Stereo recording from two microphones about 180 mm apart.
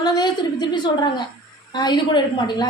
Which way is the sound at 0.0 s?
25° left (ahead or behind).